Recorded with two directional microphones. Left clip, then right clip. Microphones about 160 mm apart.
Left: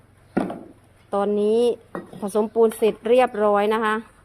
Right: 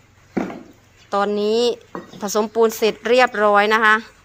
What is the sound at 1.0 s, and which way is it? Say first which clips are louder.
Speech: right 2 dB; 15° left (ahead or behind).